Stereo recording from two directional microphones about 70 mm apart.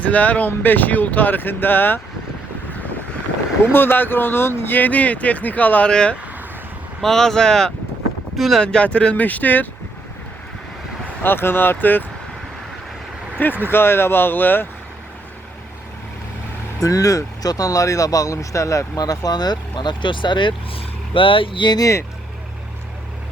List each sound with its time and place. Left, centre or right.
0.0 s speech: left
3.6 s speech: left; by 8.6 s centre
8.6 s speech: centre
11.2 s speech: left
13.4 s speech: left
16.8 s speech: left
18.9 s speech: left
21.6 s speech: left